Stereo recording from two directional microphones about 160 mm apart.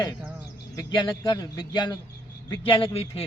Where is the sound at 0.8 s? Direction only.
25° left (ahead or behind).